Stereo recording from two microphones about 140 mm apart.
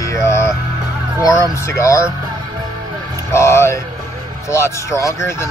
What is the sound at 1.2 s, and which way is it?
Speech, 20° left (ahead or behind).